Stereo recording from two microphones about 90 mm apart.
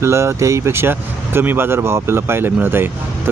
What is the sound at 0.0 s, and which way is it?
Speech, 30° right (ahead or behind).